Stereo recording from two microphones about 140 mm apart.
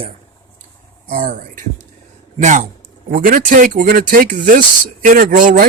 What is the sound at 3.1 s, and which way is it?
Speech, 85° right.